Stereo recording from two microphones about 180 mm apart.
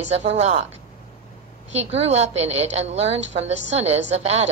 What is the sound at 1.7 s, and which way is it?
A woman's voice, 35° right (ahead or behind).